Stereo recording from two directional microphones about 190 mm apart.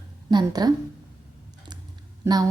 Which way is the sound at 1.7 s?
20° right (ahead or behind).